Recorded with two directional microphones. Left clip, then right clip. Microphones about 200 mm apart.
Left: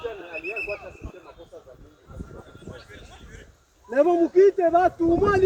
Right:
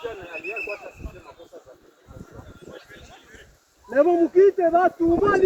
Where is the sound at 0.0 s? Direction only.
35° left (ahead or behind).